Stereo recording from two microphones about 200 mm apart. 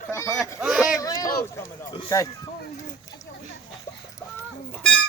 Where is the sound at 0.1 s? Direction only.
15° left (ahead or behind).